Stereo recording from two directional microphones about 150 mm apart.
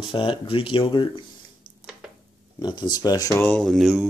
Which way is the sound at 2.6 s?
30° left (ahead or behind).